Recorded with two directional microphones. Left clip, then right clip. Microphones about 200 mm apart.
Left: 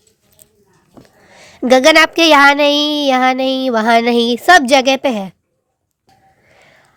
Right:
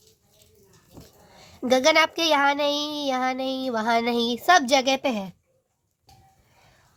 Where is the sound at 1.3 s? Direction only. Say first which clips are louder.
Left 11 dB; 35° left (ahead or behind).